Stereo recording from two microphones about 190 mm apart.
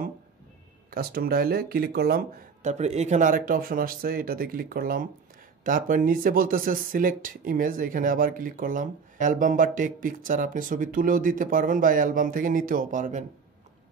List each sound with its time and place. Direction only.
0.8 s speech: 50° right (ahead or behind)
2.6 s speech: 35° right (ahead or behind)